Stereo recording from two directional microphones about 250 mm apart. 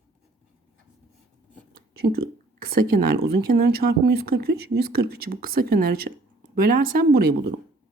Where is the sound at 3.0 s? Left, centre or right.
Right.